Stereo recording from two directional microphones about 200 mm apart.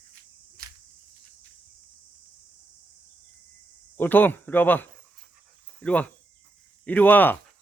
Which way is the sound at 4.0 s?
10° left (ahead or behind).